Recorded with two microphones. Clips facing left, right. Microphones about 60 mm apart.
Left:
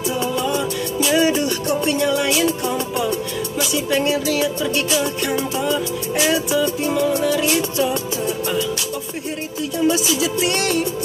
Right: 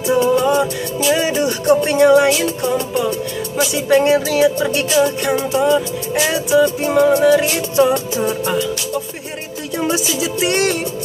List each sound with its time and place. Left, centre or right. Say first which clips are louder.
1.1 s music: left 1 dB; centre
1.8 s music: right 8 dB; right
3.7 s music: right 7 dB; right
5.3 s music: right 6 dB; centre
6.6 s music: right 5 dB; right
7.2 s music: right 5 dB; right
9.9 s music: even; centre